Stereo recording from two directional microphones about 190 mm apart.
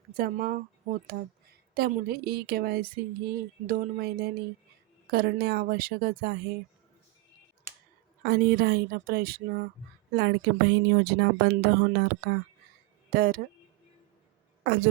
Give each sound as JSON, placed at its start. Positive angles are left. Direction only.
{"t": 0.1, "sound": "a woman's voice", "side_deg": -50}
{"t": 8.2, "sound": "a woman's voice", "side_deg": -55}
{"t": 10.2, "sound": "a woman's voice", "side_deg": -65}